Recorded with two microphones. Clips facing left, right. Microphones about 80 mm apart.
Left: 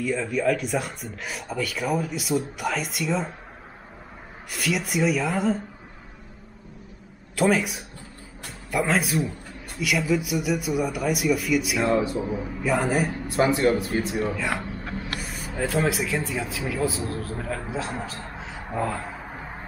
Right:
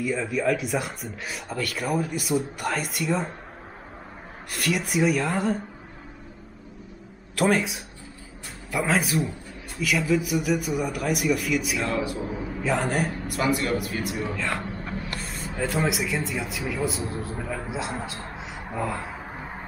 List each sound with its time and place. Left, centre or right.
0.0 s speech: centre
4.5 s speech: centre
7.3 s speech: centre
11.9 s speech: left
12.2 s speech: centre
13.3 s a man's voice: left
14.1 s speech: centre